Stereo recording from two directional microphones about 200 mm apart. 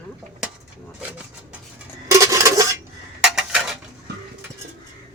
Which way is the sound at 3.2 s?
5° right (ahead or behind).